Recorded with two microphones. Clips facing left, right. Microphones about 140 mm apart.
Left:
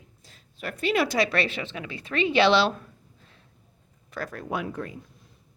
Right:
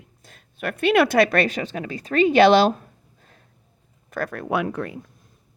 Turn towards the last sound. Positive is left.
turn(degrees=-70)  # may be behind; listen again after turning